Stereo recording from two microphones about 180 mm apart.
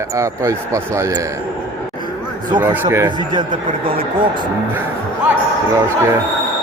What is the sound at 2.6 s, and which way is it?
Speech, 10° right (ahead or behind).